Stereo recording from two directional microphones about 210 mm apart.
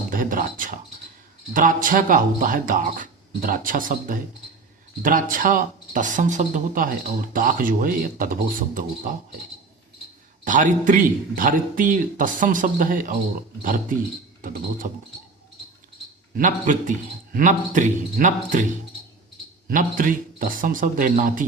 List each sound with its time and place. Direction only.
0.1 s a sound: 40° right (ahead or behind)
1.5 s speech: 40° right (ahead or behind)
10.4 s speech: 35° right (ahead or behind)
16.3 s speech: 40° right (ahead or behind)
19.6 s speech: 40° right (ahead or behind)